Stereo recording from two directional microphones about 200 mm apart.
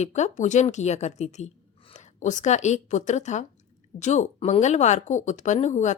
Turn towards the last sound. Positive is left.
turn(degrees=35)  # may be behind; listen again after turning